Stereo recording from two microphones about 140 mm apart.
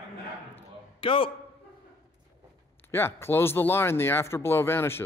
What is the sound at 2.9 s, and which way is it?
Speech, 15° left (ahead or behind).